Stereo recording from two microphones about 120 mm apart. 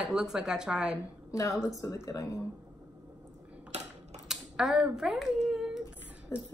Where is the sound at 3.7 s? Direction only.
65° right (ahead or behind).